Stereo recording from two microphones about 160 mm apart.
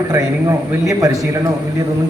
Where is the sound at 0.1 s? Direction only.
20° right (ahead or behind).